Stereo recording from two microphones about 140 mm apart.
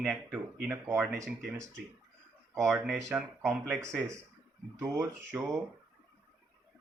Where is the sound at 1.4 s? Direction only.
Centre (ahead or behind).